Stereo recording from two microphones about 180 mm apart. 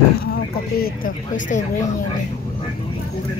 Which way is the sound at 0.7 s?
55° left (ahead or behind).